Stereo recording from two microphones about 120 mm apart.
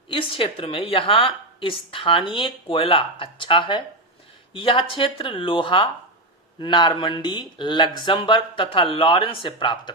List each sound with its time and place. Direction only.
0.1 s a woman's voice: 50° left (ahead or behind)